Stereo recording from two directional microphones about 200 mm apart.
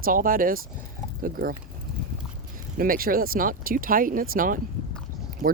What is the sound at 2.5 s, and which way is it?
Speech, 45° right (ahead or behind).